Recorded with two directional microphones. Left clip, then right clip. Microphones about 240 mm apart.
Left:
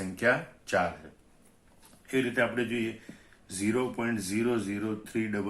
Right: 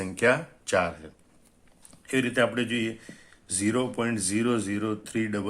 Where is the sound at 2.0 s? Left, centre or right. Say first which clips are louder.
Right 3 dB; right.